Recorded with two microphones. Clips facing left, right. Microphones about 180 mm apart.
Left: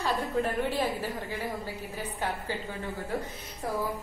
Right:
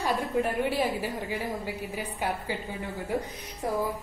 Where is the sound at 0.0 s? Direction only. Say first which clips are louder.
Right 2 dB; 10° right (ahead or behind).